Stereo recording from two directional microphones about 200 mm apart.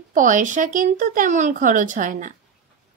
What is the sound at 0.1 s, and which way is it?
A woman's voice, 40° right (ahead or behind).